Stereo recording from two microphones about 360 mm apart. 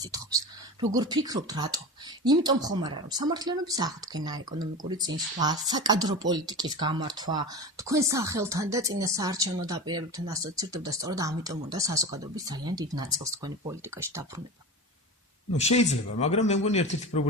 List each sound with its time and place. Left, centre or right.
0.0 s speech: centre
15.5 s speech: centre